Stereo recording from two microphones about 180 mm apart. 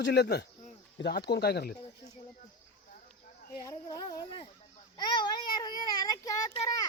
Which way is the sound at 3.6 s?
20° left (ahead or behind).